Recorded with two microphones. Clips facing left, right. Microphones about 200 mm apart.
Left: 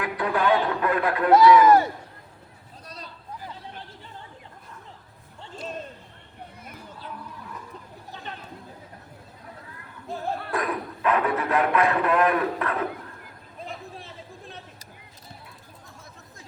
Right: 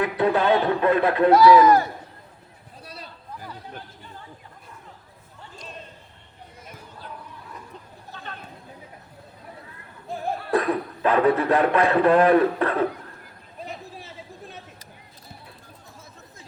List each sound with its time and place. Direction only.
0.0 s speech: 25° right (ahead or behind)
1.3 s speech: 20° left (ahead or behind)
2.8 s a sound: 10° right (ahead or behind)
8.1 s chatter: 20° left (ahead or behind)
10.1 s music: 15° right (ahead or behind)
10.5 s speech: 30° right (ahead or behind)
14.0 s a sound: 5° right (ahead or behind)